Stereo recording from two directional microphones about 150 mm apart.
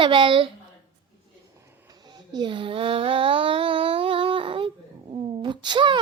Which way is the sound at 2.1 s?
30° right (ahead or behind).